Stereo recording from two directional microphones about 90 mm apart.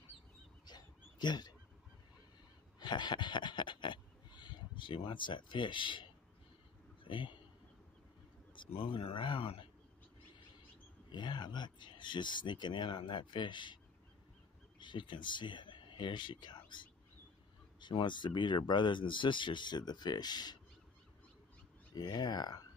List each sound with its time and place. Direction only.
0.7 s a sound: 55° left (ahead or behind)
2.8 s a sound: 55° left (ahead or behind)
7.1 s a man's voice: 65° left (ahead or behind)
8.5 s a man's voice: 70° left (ahead or behind)
11.1 s speech: 55° left (ahead or behind)
14.8 s speech: 60° left (ahead or behind)
21.9 s speech: 50° left (ahead or behind)